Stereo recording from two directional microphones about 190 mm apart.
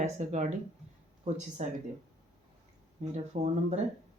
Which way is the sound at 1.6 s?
35° right (ahead or behind).